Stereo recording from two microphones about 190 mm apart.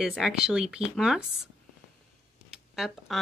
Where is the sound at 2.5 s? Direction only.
Centre (ahead or behind).